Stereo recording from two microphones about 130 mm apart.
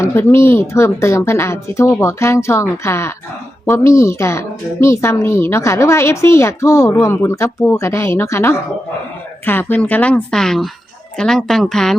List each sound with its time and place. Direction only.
0.0 s a woman's voice: 20° left (ahead or behind); by 11.9 s 5° left (ahead or behind)